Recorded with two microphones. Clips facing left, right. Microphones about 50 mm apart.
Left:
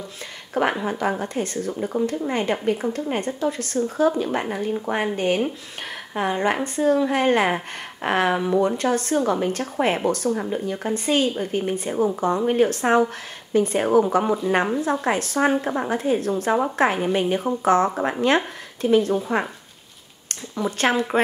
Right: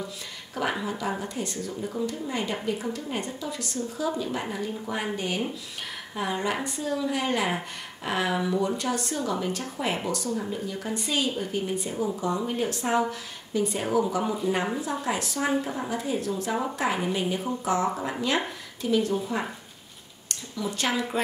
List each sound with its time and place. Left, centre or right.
0.7 s speech: left
20.5 s speech: left